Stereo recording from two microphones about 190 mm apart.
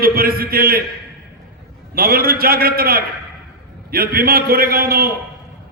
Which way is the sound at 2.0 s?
50° right (ahead or behind).